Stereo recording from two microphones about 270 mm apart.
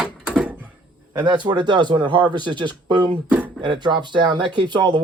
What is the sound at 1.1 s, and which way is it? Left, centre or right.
Speech, centre.